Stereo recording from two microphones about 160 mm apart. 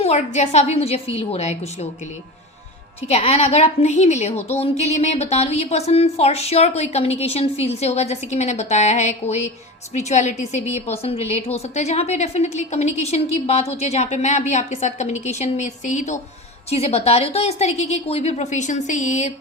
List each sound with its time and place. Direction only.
0.0 s a woman's voice: 45° left (ahead or behind)
3.1 s a woman's voice: 40° left (ahead or behind)
16.6 s a woman's voice: 40° left (ahead or behind)